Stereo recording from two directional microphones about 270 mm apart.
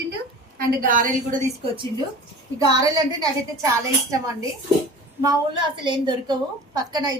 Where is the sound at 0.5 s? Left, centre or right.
Right.